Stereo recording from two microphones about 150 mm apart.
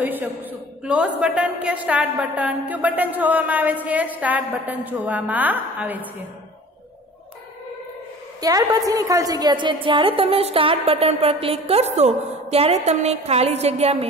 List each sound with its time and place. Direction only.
0.0 s a man's voice: 10° right (ahead or behind)
8.4 s a woman's voice: 25° right (ahead or behind); by 14.0 s 45° right (ahead or behind)